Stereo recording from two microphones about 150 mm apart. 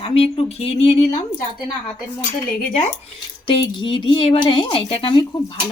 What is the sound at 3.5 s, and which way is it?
Speech, 30° left (ahead or behind).